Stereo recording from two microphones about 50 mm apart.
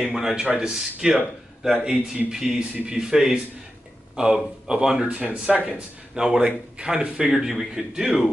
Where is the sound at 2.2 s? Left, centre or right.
Centre.